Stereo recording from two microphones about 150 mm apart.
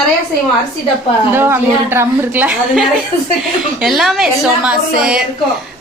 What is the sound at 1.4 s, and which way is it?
A woman's voice, 15° right (ahead or behind).